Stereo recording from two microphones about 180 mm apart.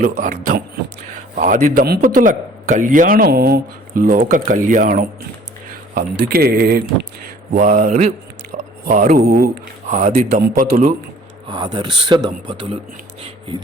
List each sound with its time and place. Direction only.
0.2 s a man's voice: 50° right (ahead or behind)
5.9 s speech: 60° right (ahead or behind)
7.5 s a man's voice: 45° right (ahead or behind)
11.4 s speech: 25° right (ahead or behind)